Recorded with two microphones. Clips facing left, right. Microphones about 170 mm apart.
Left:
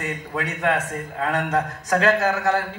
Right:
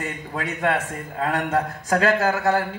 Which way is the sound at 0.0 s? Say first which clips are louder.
Left 1 dB; 35° right (ahead or behind).